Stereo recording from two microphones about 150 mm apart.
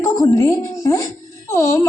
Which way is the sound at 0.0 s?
20° left (ahead or behind).